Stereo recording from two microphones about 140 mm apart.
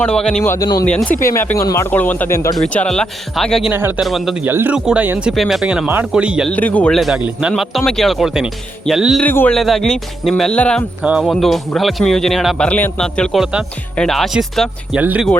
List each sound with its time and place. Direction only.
0.0 s speech: 5° left (ahead or behind)
0.4 s speech: 20° left (ahead or behind)
0.9 s speech: 10° left (ahead or behind)
1.2 s speech: 20° left (ahead or behind)
2.6 s speech: 5° left (ahead or behind)
3.7 s speech: 15° right (ahead or behind)
4.0 s speech: centre (ahead or behind)
4.4 s speech: 15° right (ahead or behind)
6.5 s speech: 10° left (ahead or behind)
9.2 s speech: 15° left (ahead or behind)
9.6 s speech: centre (ahead or behind)
14.9 s speech: 10° right (ahead or behind)